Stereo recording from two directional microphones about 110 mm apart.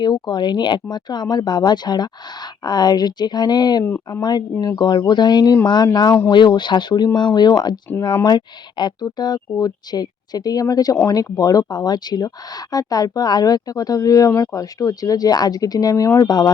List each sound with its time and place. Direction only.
0.0 s speech: 40° left (ahead or behind)